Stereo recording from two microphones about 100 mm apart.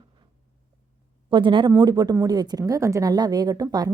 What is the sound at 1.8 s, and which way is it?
A woman's voice, 40° right (ahead or behind).